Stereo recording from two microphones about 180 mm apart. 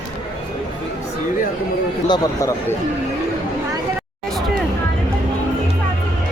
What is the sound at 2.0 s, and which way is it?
Speech, 20° left (ahead or behind).